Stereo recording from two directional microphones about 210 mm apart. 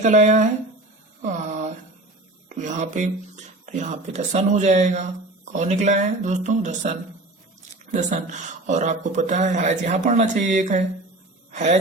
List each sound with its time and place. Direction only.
0.0 s speech: 35° right (ahead or behind)
1.2 s a sound: 35° right (ahead or behind)
2.5 s speech: 35° right (ahead or behind)
7.9 s speech: 35° right (ahead or behind)